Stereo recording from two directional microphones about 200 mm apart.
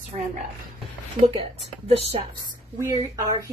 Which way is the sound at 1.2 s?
30° right (ahead or behind).